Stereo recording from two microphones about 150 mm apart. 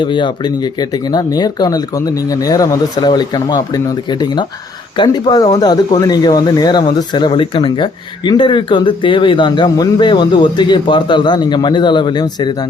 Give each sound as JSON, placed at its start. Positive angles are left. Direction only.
{"t": 0.0, "sound": "speech", "side_deg": 30}